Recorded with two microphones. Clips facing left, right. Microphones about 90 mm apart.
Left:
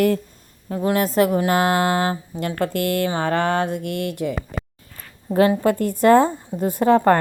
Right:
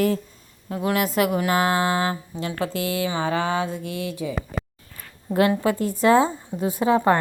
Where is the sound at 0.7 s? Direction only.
30° left (ahead or behind).